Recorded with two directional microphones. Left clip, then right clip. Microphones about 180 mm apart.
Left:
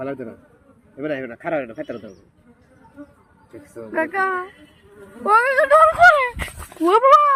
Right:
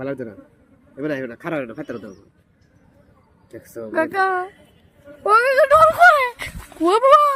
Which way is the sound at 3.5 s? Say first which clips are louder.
Right 2 dB; 50° right (ahead or behind).